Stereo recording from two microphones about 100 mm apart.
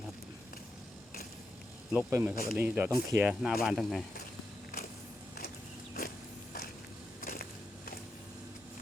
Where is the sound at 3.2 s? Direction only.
5° right (ahead or behind).